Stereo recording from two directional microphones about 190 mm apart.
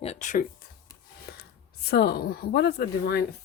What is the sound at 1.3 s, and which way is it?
Speech, 55° left (ahead or behind).